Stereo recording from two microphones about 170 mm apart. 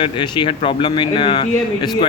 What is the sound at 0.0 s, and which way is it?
Speech, 30° left (ahead or behind).